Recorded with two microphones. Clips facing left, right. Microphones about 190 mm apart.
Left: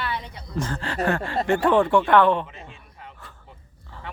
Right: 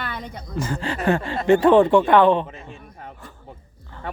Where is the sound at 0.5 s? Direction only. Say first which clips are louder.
Right 1 dB; 10° right (ahead or behind).